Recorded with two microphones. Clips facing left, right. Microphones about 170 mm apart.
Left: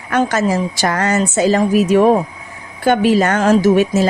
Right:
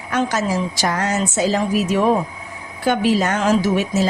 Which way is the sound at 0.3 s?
55° left (ahead or behind).